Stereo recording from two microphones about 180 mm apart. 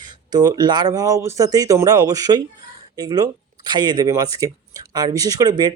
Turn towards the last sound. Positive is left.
turn(degrees=-25)  # may be behind; listen again after turning